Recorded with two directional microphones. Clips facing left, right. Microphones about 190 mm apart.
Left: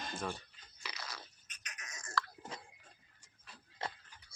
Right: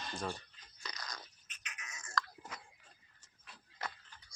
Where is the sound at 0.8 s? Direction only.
5° left (ahead or behind).